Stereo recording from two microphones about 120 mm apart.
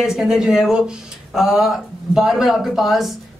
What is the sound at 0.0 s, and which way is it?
A woman's voice, 5° right (ahead or behind).